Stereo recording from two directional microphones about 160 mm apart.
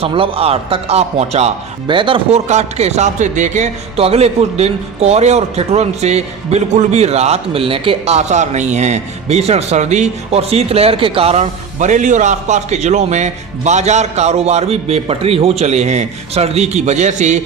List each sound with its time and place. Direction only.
0.0 s speech: 35° right (ahead or behind)
2.5 s speech: 45° right (ahead or behind)